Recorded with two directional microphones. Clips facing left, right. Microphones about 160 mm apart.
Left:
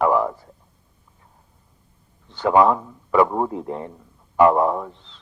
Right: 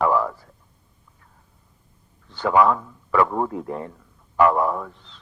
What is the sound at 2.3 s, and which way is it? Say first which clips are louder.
A man's voice: left 2 dB; 20° left (ahead or behind).